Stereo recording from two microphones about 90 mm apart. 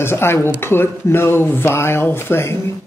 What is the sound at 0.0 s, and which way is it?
Speech, 25° left (ahead or behind).